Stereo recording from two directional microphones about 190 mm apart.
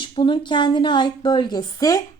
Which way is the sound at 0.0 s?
25° left (ahead or behind).